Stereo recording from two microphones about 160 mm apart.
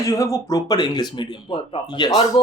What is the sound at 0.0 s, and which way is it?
Speech, 20° left (ahead or behind).